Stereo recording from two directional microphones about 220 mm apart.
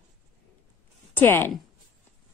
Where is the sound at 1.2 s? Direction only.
10° left (ahead or behind).